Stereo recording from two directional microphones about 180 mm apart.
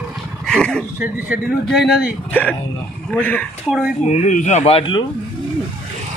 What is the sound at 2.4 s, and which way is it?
Speech, 10° left (ahead or behind).